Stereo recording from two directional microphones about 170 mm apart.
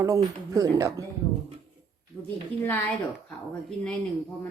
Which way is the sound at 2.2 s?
10° left (ahead or behind).